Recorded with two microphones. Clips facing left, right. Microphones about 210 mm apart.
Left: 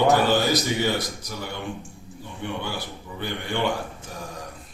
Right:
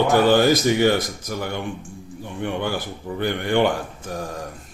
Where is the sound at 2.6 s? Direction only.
50° right (ahead or behind).